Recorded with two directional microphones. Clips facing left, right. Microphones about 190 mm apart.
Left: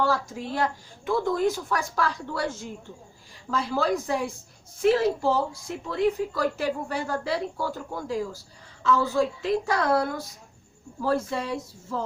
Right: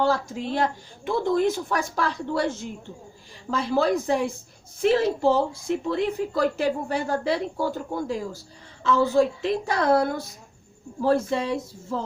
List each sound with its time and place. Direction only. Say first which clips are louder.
0.0 s speech: right 2 dB; 25° right (ahead or behind)
3.5 s speech: right 3 dB; 25° right (ahead or behind)